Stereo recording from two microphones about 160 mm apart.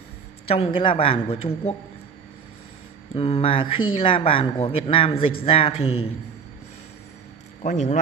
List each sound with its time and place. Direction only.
0.5 s speech: 35° left (ahead or behind)
3.2 s speech: 40° left (ahead or behind)
7.6 s speech: 50° left (ahead or behind)